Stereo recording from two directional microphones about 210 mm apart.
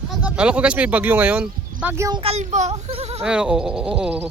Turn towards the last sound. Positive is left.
turn(degrees=-5)  # may be behind; listen again after turning